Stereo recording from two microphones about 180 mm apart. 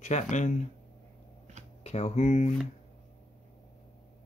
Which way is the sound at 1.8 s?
35° left (ahead or behind).